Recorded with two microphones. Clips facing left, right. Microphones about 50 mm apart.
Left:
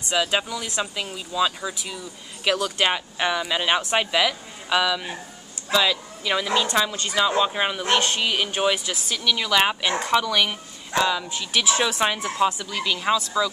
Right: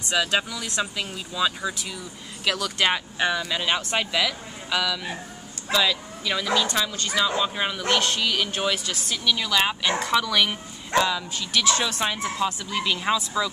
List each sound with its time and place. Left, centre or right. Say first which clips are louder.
0.1 s speech: left 1 dB; centre
2.4 s speech: left 2 dB; left
2.9 s speech: even; centre
5.7 s speech: left 2 dB; centre
9.5 s speech: left 4 dB; centre
11.5 s speech: left 1 dB; centre
12.6 s speech: left 1 dB; centre